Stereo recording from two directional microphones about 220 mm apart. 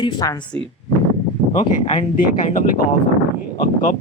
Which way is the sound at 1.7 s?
35° left (ahead or behind).